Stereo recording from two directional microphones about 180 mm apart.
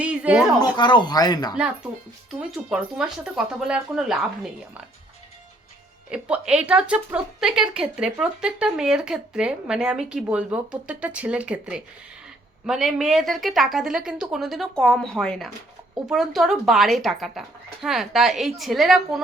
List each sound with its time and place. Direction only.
0.0 s a woman's voice: 5° right (ahead or behind)
0.8 s speech: 25° left (ahead or behind)
2.3 s speech: centre (ahead or behind)
6.1 s speech: 5° right (ahead or behind)